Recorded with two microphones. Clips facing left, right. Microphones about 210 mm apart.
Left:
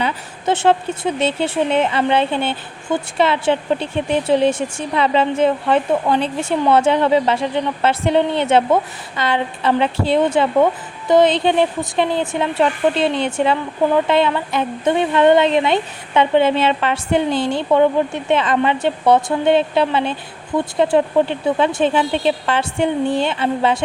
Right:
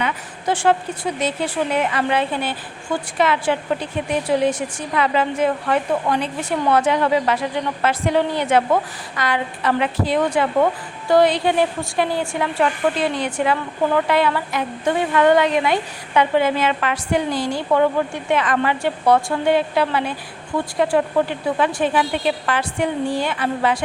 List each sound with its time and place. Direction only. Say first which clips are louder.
0.0 s speech: left 2 dB; 25° left (ahead or behind)